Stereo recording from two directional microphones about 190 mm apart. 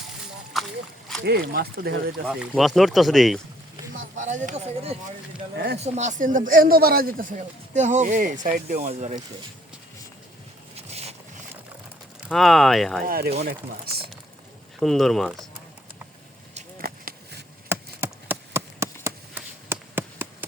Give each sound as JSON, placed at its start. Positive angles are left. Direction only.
{"t": 0.5, "sound": "splash", "side_deg": 0}
{"t": 1.2, "sound": "speech", "side_deg": -60}
{"t": 2.2, "sound": "speech", "side_deg": 0}
{"t": 4.2, "sound": "speech", "side_deg": -40}
{"t": 5.5, "sound": "speech", "side_deg": -60}
{"t": 5.8, "sound": "speech", "side_deg": -40}
{"t": 12.3, "sound": "speech", "side_deg": 0}
{"t": 13.1, "sound": "speech", "side_deg": -50}
{"t": 14.8, "sound": "speech", "side_deg": 0}
{"t": 16.8, "sound": "a sound", "side_deg": -55}
{"t": 17.7, "sound": "a sound", "side_deg": -10}